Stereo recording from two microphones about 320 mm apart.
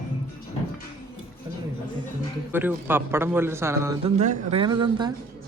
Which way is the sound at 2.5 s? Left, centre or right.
Centre.